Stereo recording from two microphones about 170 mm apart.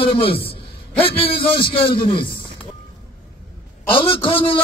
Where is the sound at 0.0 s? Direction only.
30° left (ahead or behind).